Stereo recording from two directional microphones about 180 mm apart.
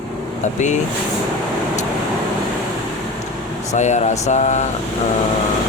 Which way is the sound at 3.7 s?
40° left (ahead or behind).